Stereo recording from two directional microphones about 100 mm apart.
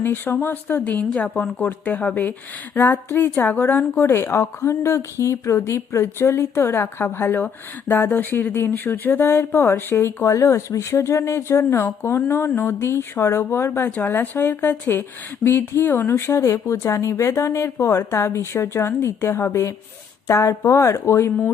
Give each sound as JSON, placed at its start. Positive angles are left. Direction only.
{"t": 0.0, "sound": "a woman's voice", "side_deg": 20}